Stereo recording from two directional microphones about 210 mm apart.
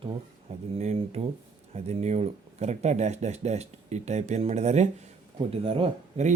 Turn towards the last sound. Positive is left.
turn(degrees=-30)  # may be behind; listen again after turning